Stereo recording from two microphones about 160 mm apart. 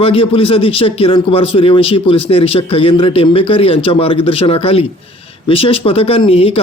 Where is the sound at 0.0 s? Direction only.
35° left (ahead or behind).